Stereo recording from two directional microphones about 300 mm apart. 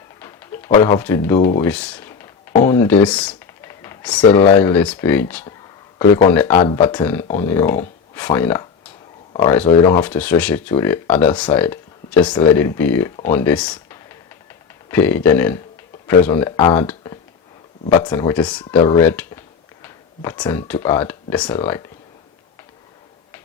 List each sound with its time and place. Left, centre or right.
0.2 s pigeon: centre
0.9 s speech: centre
10.0 s speech: centre
13.2 s typing: centre
14.8 s speech: centre